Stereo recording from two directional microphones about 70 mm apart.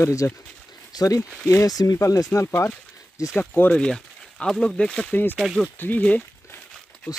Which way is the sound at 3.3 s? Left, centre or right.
Centre.